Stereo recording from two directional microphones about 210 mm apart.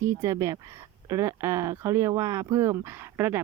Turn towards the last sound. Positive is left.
turn(degrees=-10)  # may be behind; listen again after turning